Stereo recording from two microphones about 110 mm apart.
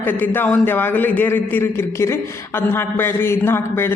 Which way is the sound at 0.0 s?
15° left (ahead or behind).